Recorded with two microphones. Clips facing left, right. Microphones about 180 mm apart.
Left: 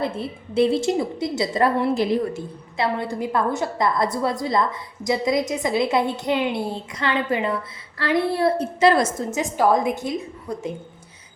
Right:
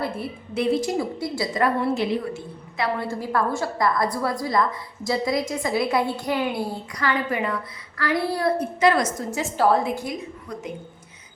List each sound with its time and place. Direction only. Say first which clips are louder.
0.0 s a woman's voice: left 2 dB; 25° left (ahead or behind)
9.4 s a woman's voice: left 1 dB; 15° left (ahead or behind)